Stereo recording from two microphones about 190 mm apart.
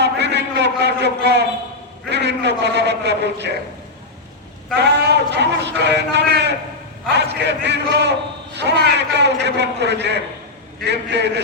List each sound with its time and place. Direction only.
0.0 s a sound: 65° right (ahead or behind)
2.0 s a man's voice: 65° right (ahead or behind)
4.8 s a man's voice: 65° right (ahead or behind)